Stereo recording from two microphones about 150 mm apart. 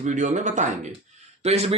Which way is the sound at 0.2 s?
55° right (ahead or behind).